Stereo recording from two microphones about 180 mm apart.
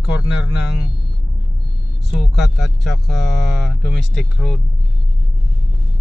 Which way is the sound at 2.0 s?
Centre (ahead or behind).